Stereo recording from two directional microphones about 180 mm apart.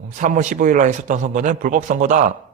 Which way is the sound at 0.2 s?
45° right (ahead or behind).